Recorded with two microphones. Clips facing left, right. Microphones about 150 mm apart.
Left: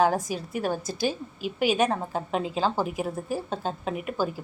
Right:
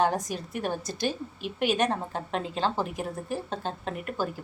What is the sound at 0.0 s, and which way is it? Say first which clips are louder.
A woman's voice: left 3 dB; centre (ahead or behind).